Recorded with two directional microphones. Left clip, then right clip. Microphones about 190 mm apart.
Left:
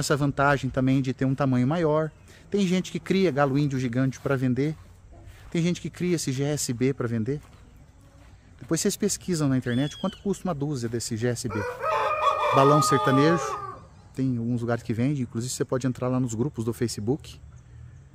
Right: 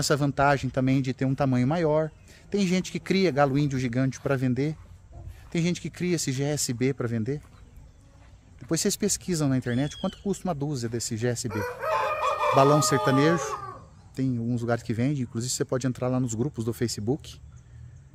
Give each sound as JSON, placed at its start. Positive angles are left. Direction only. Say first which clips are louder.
{"t": 0.0, "sound": "speech", "louder": "even", "side_deg": -10}
{"t": 8.6, "sound": "speech", "louder": "left 1 dB", "side_deg": 0}
{"t": 11.4, "sound": "chicken", "louder": "left 1 dB", "side_deg": -60}
{"t": 11.9, "sound": "chicken", "louder": "left 2 dB", "side_deg": 15}
{"t": 12.5, "sound": "speech", "louder": "left 1 dB", "side_deg": 0}